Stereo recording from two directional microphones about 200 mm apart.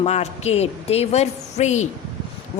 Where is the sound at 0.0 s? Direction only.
35° left (ahead or behind).